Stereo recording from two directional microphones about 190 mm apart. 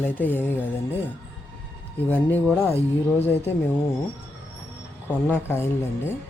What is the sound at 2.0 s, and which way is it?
Speech, 10° left (ahead or behind).